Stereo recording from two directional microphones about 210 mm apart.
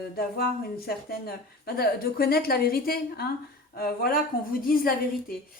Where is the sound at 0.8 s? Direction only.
45° left (ahead or behind).